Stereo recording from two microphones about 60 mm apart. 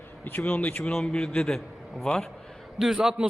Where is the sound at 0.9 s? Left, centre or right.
Centre.